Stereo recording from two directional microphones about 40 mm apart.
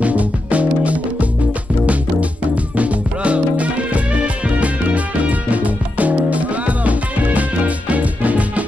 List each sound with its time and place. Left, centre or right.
0.0 s music: right